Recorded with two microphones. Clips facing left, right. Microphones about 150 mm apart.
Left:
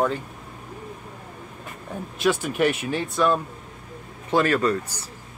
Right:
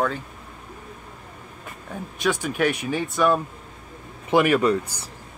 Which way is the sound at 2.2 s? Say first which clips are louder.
Left 1 dB; 5° left (ahead or behind).